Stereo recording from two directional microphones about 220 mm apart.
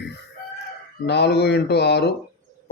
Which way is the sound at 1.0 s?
50° left (ahead or behind).